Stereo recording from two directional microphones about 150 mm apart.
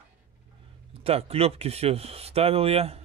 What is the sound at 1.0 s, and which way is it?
Speech, 40° right (ahead or behind).